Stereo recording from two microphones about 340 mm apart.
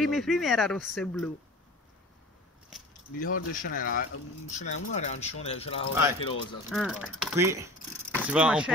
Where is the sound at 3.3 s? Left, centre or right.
Left.